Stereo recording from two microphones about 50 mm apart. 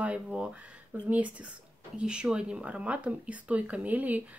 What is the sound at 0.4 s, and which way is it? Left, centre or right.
Speech, right.